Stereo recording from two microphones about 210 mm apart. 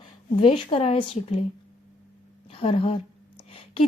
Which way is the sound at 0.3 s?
25° left (ahead or behind).